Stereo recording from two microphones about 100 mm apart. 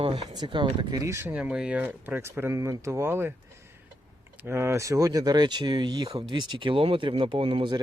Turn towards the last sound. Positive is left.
turn(degrees=-55)  # may be behind; listen again after turning